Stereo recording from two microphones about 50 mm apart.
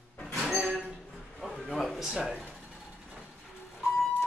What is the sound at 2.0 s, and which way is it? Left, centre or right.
Speech, centre.